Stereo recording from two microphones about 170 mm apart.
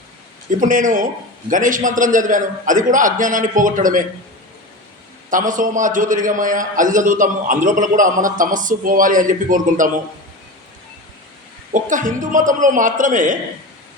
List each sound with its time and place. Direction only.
0.6 s a man's voice: 50° right (ahead or behind)
5.3 s a man's voice: 50° right (ahead or behind)
11.7 s a man's voice: 50° right (ahead or behind)